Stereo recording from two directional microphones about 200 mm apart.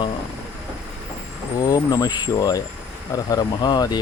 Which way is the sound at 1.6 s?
20° left (ahead or behind).